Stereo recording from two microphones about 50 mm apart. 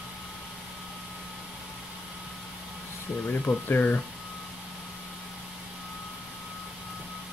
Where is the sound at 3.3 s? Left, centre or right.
Left.